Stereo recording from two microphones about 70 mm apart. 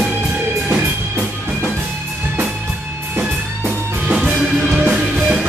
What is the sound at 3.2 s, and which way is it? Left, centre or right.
Music, centre.